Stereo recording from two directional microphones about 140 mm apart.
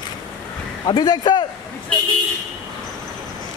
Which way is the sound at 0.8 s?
35° left (ahead or behind).